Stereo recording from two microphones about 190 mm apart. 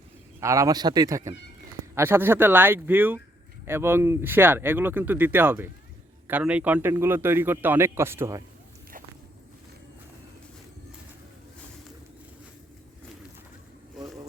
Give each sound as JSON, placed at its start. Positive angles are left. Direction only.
{"t": 0.3, "sound": "a man's voice", "side_deg": -15}